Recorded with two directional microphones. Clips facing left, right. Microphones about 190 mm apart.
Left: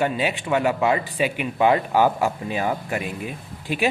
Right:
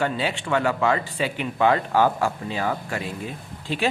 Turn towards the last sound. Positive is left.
turn(degrees=15)  # may be behind; listen again after turning